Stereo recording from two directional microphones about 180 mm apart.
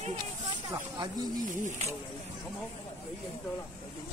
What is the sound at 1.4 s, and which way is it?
Speech, 45° right (ahead or behind).